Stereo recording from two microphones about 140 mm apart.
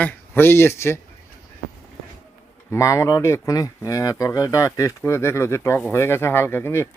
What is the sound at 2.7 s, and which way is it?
Speech, 20° left (ahead or behind).